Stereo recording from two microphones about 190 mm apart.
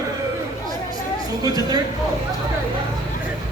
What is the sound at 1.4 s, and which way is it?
Speech, 20° right (ahead or behind).